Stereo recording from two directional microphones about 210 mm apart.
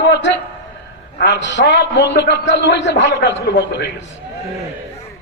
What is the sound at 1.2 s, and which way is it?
A man's voice, 55° left (ahead or behind).